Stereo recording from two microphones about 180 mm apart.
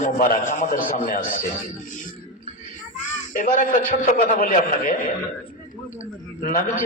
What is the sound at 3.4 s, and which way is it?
A man's voice, 50° left (ahead or behind).